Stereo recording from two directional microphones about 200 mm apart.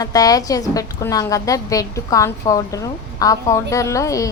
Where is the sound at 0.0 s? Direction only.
20° left (ahead or behind).